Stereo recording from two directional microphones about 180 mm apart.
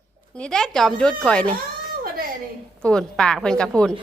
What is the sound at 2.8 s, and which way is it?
Speech, 5° left (ahead or behind).